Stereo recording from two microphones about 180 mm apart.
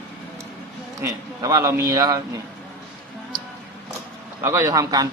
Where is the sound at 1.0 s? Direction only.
15° right (ahead or behind).